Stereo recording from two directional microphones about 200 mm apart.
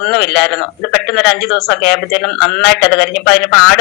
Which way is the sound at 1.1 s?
55° left (ahead or behind).